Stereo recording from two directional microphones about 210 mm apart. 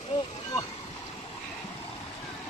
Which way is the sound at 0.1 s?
20° left (ahead or behind).